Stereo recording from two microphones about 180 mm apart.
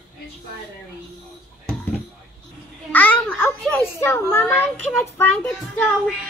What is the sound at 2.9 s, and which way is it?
Babbling, 10° left (ahead or behind).